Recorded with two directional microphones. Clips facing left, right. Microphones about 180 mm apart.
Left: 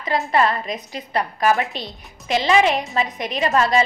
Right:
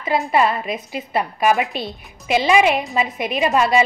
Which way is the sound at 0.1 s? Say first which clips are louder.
Right 1 dB; 10° right (ahead or behind).